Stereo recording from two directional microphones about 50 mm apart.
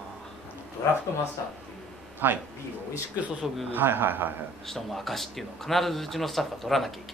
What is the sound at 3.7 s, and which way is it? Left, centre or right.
Speech, right.